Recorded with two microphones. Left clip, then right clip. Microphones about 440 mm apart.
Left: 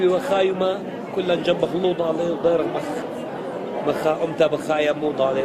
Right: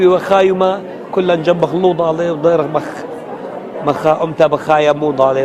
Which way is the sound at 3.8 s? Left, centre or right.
Right.